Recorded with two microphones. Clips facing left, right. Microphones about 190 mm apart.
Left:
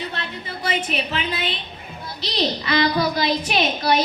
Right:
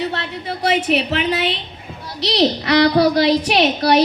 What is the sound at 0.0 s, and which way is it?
A woman's voice, 70° right (ahead or behind).